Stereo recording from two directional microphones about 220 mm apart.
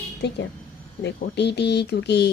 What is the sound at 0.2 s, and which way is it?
A woman's voice, 50° left (ahead or behind).